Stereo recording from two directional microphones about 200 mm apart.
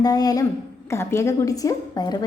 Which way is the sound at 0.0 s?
20° left (ahead or behind).